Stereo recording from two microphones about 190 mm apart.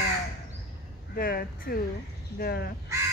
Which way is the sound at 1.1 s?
50° left (ahead or behind).